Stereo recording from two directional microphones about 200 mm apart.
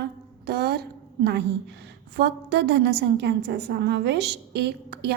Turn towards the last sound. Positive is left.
turn(degrees=-55)  # may be behind; listen again after turning